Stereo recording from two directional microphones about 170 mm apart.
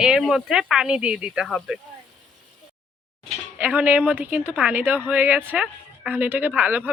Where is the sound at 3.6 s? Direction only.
10° right (ahead or behind).